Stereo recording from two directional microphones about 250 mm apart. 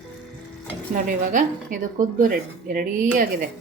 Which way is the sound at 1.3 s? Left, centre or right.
Right.